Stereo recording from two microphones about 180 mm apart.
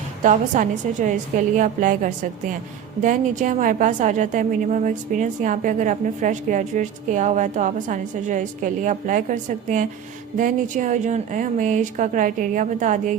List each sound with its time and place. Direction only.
0.2 s a woman's voice: 45° right (ahead or behind)